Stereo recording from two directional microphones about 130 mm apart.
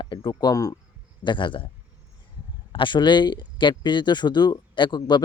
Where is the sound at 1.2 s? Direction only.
35° left (ahead or behind).